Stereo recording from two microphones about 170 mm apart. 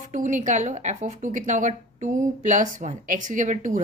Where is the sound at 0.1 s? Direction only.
45° right (ahead or behind).